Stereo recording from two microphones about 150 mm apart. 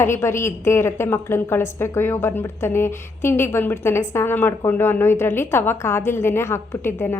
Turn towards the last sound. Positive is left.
turn(degrees=15)  # may be behind; listen again after turning